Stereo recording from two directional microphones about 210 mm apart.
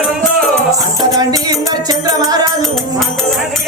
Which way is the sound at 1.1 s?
15° right (ahead or behind).